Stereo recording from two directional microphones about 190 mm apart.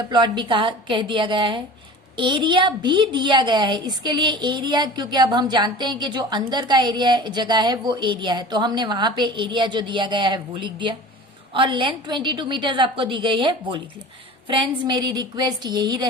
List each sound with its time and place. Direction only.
0.1 s a woman's voice: 25° right (ahead or behind)